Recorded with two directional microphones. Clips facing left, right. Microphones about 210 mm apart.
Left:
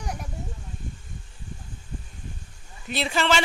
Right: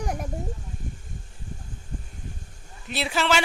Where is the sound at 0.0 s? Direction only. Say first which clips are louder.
Right 5 dB; 55° right (ahead or behind).